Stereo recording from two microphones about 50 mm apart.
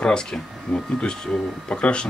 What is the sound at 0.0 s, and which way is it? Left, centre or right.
Speech, centre.